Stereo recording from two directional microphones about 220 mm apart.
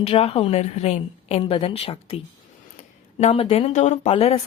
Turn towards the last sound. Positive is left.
turn(degrees=30)  # may be behind; listen again after turning